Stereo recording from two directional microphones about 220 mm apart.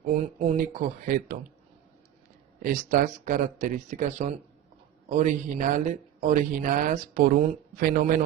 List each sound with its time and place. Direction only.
0.3 s speech: 35° right (ahead or behind)
2.6 s speech: 40° right (ahead or behind)